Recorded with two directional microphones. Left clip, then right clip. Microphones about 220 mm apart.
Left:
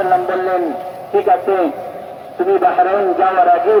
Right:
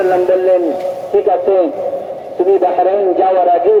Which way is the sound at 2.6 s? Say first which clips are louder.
Right 1 dB; 25° left (ahead or behind).